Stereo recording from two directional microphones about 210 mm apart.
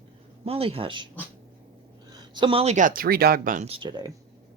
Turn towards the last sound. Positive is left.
turn(degrees=-20)  # may be behind; listen again after turning